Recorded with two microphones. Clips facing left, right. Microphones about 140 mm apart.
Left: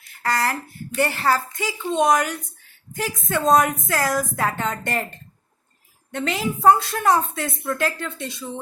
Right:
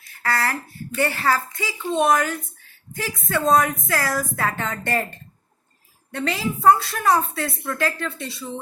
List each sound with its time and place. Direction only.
0.2 s a woman's voice: 15° left (ahead or behind)
6.1 s a woman's voice: 20° left (ahead or behind)